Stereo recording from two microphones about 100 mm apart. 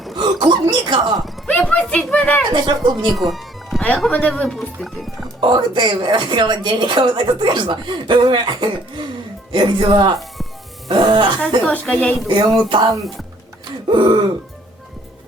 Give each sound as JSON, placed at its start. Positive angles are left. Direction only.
{"t": 0.2, "sound": "a sound", "side_deg": -50}
{"t": 1.5, "sound": "a sound", "side_deg": 15}
{"t": 1.8, "sound": "speech", "side_deg": 10}
{"t": 2.5, "sound": "speech", "side_deg": -50}
{"t": 3.0, "sound": "a sound", "side_deg": 0}
{"t": 3.8, "sound": "speech", "side_deg": 10}
{"t": 4.4, "sound": "speech", "side_deg": 0}
{"t": 5.4, "sound": "speech", "side_deg": -50}
{"t": 11.7, "sound": "speech", "side_deg": 15}
{"t": 12.3, "sound": "speech", "side_deg": -55}